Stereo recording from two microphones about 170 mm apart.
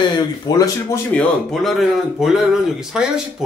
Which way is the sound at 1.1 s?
Centre (ahead or behind).